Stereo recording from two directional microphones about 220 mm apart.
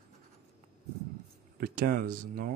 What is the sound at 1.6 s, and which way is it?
Speech, 40° right (ahead or behind).